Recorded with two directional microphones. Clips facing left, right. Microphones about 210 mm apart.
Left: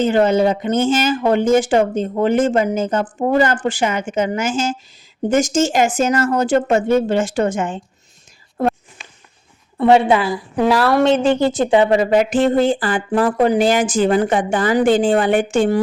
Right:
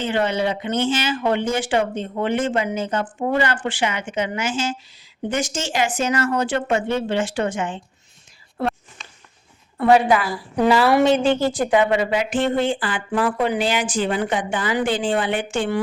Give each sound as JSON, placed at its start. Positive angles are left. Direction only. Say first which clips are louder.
{"t": 0.0, "sound": "speech", "louder": "left 7 dB", "side_deg": 45}
{"t": 9.7, "sound": "a woman's voice", "louder": "left 3 dB", "side_deg": 25}
{"t": 10.5, "sound": "a woman's voice", "louder": "left 1 dB", "side_deg": 0}
{"t": 10.8, "sound": "speech", "louder": "left 2 dB", "side_deg": -10}
{"t": 11.3, "sound": "speech", "louder": "left 4 dB", "side_deg": 20}
{"t": 11.7, "sound": "speech", "louder": "left 5 dB", "side_deg": 35}